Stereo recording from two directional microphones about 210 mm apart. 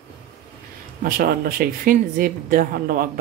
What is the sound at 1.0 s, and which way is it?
A woman's voice, 45° right (ahead or behind).